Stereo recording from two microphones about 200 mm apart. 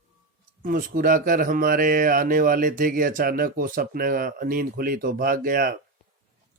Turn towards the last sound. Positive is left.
turn(degrees=-45)  # may be behind; listen again after turning